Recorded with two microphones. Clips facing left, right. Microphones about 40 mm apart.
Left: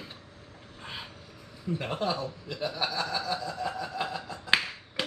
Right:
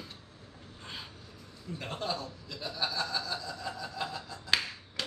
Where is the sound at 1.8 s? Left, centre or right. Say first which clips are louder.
Left 4 dB; left.